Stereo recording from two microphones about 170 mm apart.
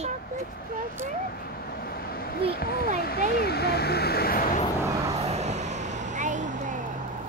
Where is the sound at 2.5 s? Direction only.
65° left (ahead or behind).